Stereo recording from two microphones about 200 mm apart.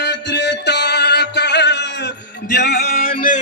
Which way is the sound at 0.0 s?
60° left (ahead or behind).